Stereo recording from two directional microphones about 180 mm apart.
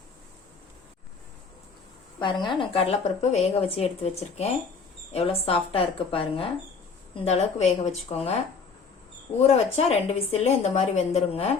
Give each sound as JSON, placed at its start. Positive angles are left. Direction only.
{"t": 2.1, "sound": "a woman's voice", "side_deg": 25}
{"t": 9.5, "sound": "a woman's voice", "side_deg": 35}